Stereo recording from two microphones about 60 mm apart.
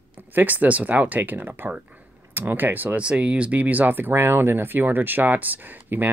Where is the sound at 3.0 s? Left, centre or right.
Centre.